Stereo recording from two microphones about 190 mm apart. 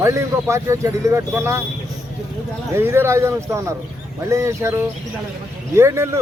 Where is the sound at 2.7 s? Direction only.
15° right (ahead or behind).